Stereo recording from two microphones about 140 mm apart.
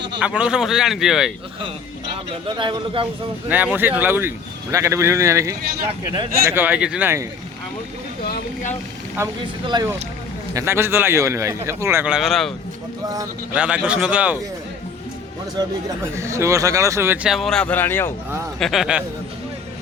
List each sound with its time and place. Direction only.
0.2 s speech: 10° right (ahead or behind)
2.3 s a man's voice: 35° right (ahead or behind)
3.5 s a man's voice: 10° right (ahead or behind)
9.4 s a man's voice: 35° right (ahead or behind)
10.5 s speech: 20° right (ahead or behind)
12.0 s a man's voice: 5° right (ahead or behind)
16.1 s speech: 20° right (ahead or behind)
17.2 s speech: centre (ahead or behind); by 18.1 s 15° left (ahead or behind)
18.6 s speech: centre (ahead or behind)